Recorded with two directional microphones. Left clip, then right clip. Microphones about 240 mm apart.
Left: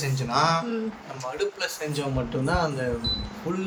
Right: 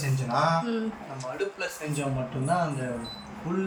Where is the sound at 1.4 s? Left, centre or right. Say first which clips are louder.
Left 4 dB; centre.